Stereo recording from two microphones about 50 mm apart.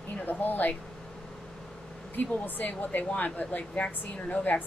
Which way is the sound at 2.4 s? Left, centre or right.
Left.